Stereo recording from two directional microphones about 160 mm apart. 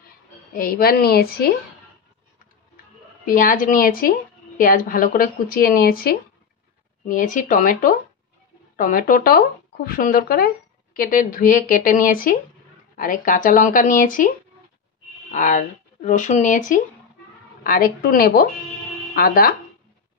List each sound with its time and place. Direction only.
0.6 s a woman's voice: 65° left (ahead or behind)
3.3 s speech: 60° left (ahead or behind)
7.1 s speech: 55° left (ahead or behind)
15.3 s speech: 50° left (ahead or behind)